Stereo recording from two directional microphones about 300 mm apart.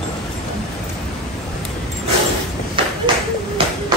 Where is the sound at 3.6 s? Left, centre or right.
Centre.